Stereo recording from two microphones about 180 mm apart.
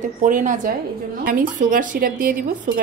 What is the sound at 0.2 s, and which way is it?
Speech, 45° right (ahead or behind).